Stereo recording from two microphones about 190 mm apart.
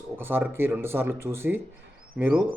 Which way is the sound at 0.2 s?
10° right (ahead or behind).